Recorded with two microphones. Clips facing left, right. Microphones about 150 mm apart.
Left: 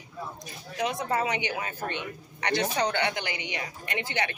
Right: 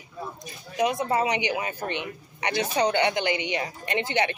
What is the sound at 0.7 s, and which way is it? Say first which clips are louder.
Speech: right 4 dB; 15° right (ahead or behind).